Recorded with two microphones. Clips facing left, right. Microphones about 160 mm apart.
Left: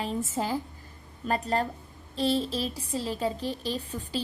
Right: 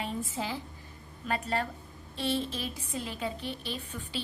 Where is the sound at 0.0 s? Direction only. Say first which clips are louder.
Left 4 dB; 45° left (ahead or behind).